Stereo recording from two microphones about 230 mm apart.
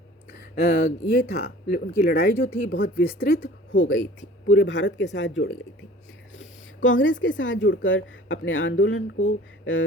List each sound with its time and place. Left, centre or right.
0.3 s speech: left
3.8 s speech: left
6.8 s speech: left